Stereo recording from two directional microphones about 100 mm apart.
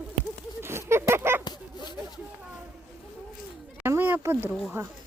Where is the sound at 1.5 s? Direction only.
50° left (ahead or behind).